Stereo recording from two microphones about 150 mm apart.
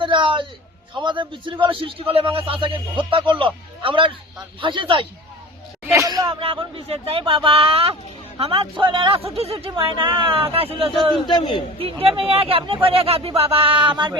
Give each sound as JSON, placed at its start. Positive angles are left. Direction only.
{"t": 0.0, "sound": "a sound", "side_deg": -35}
{"t": 0.9, "sound": "speech", "side_deg": -30}
{"t": 5.8, "sound": "a sound", "side_deg": -20}
{"t": 6.4, "sound": "speech", "side_deg": -35}
{"t": 11.3, "sound": "a man's voice", "side_deg": 30}
{"t": 11.8, "sound": "speech", "side_deg": -40}